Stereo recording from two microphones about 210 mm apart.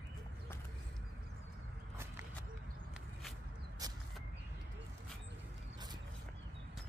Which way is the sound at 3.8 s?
15° right (ahead or behind).